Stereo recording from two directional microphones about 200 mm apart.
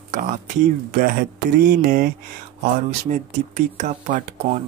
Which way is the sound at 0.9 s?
40° right (ahead or behind).